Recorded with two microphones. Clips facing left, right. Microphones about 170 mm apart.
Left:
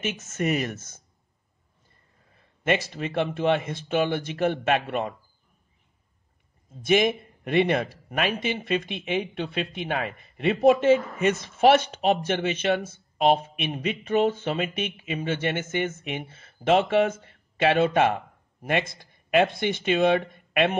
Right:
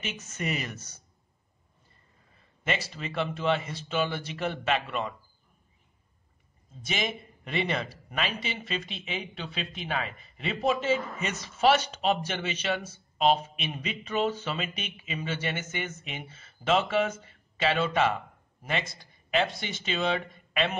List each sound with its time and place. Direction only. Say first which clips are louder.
0.0 s speech: left 7 dB; 50° left (ahead or behind)
2.9 s speech: left 5 dB; 55° left (ahead or behind)
6.8 s speech: left 11 dB; 55° left (ahead or behind)